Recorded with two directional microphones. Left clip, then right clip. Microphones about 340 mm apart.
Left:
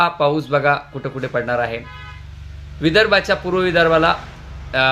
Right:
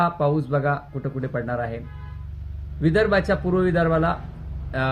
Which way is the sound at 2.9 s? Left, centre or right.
Centre.